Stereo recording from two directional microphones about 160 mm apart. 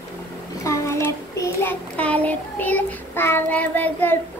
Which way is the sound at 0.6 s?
20° left (ahead or behind).